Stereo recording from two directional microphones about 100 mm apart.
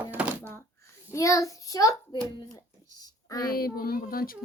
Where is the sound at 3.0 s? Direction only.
40° left (ahead or behind).